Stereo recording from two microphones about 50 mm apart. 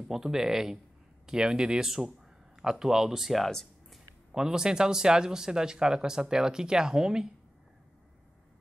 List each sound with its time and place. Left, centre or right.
0.1 s speech: centre
3.4 s a sound: centre
4.3 s speech: centre